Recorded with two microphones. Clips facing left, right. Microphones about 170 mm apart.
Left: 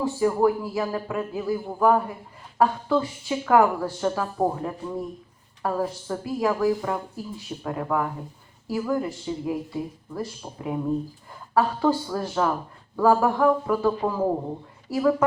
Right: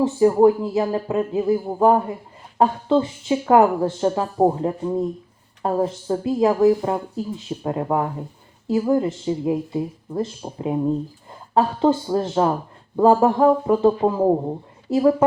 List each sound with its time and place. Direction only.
0.0 s speech: 25° right (ahead or behind)